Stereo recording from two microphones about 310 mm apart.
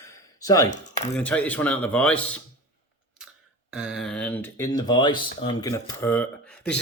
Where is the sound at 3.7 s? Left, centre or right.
Centre.